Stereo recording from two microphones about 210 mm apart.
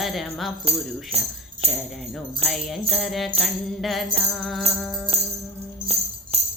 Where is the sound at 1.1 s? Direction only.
30° right (ahead or behind).